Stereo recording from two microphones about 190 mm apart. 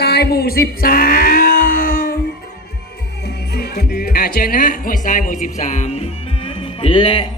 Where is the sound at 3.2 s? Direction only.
60° left (ahead or behind); by 7.2 s 30° left (ahead or behind).